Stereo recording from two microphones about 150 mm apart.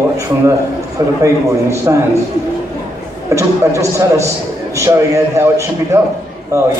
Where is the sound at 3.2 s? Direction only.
20° right (ahead or behind).